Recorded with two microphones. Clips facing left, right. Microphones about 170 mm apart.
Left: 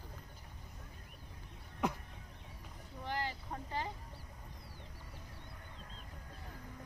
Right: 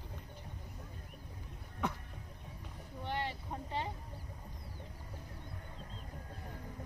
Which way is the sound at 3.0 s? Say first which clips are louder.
Right 1 dB; 30° right (ahead or behind).